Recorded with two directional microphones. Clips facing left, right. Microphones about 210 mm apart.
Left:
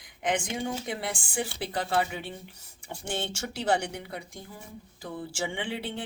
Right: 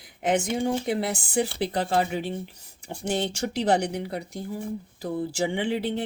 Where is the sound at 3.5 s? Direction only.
40° right (ahead or behind).